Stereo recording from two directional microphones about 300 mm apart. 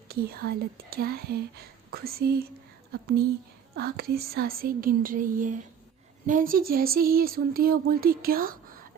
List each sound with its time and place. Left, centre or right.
0.1 s speech: right